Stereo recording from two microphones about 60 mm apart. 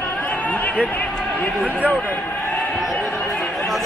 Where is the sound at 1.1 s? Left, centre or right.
Left.